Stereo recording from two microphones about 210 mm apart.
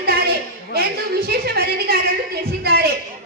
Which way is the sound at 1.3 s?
50° right (ahead or behind).